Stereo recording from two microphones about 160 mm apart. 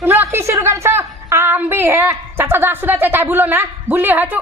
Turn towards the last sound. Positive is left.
turn(degrees=-10)  # may be behind; listen again after turning